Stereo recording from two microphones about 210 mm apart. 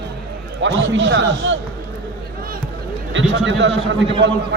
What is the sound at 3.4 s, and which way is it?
Speech, 60° right (ahead or behind).